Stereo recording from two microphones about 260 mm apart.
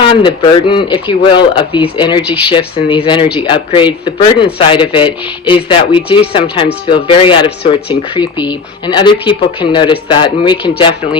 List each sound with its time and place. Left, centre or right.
0.0 s speech: centre